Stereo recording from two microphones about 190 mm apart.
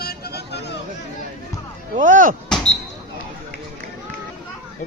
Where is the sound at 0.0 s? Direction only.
55° left (ahead or behind).